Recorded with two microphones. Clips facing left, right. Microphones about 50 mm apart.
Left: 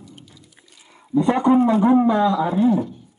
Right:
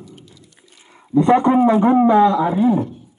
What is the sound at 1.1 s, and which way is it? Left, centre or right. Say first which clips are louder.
Speech: right 3 dB; right.